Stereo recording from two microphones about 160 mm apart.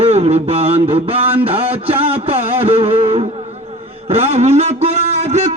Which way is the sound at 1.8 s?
40° right (ahead or behind).